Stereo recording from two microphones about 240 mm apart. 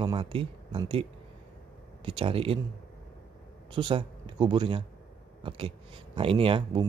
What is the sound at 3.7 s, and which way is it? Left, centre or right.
Speech, right.